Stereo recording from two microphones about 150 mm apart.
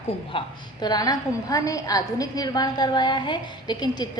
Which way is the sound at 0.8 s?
25° left (ahead or behind).